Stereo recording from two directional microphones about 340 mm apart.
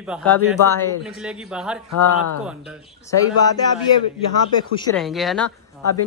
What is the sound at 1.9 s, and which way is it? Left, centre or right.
Speech, left.